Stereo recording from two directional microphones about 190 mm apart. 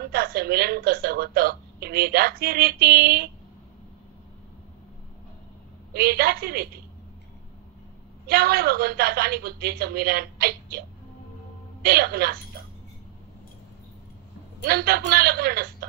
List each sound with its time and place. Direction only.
0.1 s a woman's voice: 55° right (ahead or behind)
5.9 s a woman's voice: 55° right (ahead or behind)
8.3 s a woman's voice: 55° right (ahead or behind)
11.8 s a woman's voice: 55° right (ahead or behind)
14.6 s a woman's voice: 55° right (ahead or behind)